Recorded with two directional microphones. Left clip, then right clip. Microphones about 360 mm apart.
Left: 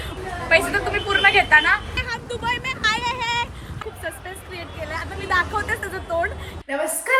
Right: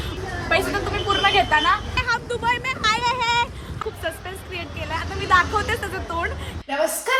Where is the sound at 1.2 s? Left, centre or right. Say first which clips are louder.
Left 3 dB; centre.